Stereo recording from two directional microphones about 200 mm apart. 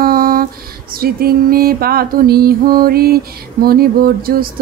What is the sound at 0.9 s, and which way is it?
Music, 50° right (ahead or behind).